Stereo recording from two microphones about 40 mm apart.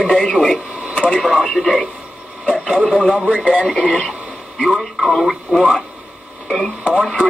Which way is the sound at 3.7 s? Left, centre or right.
Centre.